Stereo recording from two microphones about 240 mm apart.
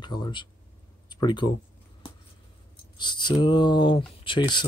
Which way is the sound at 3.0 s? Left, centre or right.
Centre.